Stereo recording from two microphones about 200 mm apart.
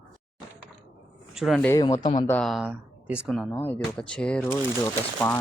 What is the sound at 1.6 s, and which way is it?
Speech, 15° left (ahead or behind).